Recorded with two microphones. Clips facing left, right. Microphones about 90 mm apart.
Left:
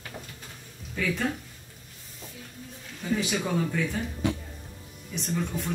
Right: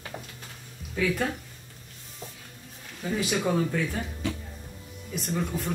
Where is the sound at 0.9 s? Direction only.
10° right (ahead or behind).